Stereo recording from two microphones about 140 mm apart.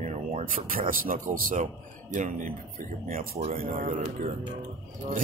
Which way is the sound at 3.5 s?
70° right (ahead or behind).